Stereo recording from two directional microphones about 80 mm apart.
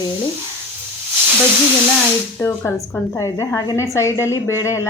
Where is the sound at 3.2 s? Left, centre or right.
Left.